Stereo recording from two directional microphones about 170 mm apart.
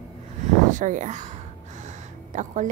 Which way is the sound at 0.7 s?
50° right (ahead or behind).